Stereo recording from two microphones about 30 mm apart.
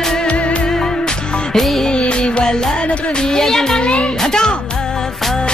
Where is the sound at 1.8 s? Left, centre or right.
Left.